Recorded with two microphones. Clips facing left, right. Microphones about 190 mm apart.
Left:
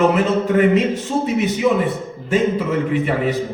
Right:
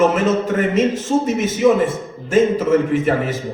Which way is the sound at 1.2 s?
45° right (ahead or behind).